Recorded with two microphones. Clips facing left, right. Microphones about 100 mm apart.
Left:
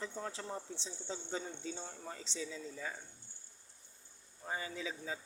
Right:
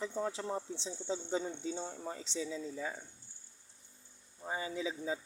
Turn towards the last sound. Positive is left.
turn(degrees=-20)  # may be behind; listen again after turning